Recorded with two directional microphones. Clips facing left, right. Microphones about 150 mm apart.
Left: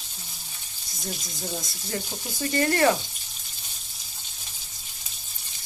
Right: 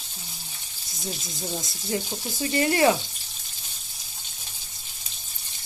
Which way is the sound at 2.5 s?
15° right (ahead or behind).